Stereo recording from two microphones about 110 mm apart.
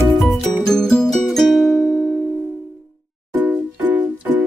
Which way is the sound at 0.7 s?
5° left (ahead or behind).